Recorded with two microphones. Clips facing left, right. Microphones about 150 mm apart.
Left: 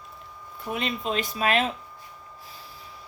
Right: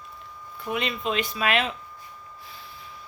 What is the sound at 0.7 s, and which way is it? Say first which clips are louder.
Speech: right 1 dB; 40° left (ahead or behind).